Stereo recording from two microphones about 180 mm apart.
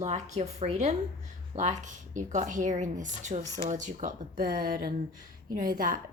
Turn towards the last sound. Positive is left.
turn(degrees=-50)  # may be behind; listen again after turning